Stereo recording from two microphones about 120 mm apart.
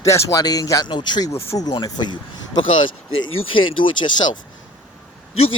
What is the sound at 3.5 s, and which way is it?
Speech, 45° left (ahead or behind).